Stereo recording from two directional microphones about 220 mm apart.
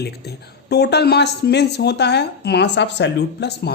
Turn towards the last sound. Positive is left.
turn(degrees=50)  # may be behind; listen again after turning